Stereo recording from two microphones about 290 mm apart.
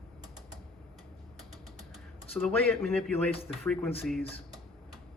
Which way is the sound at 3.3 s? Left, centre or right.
Centre.